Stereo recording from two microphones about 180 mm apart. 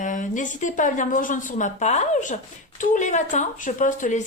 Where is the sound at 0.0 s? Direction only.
45° left (ahead or behind).